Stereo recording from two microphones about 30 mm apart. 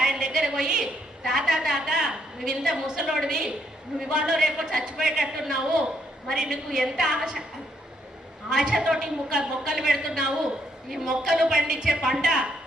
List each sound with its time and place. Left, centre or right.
0.0 s a sound: right
1.9 s a woman's voice: right
8.4 s speech: right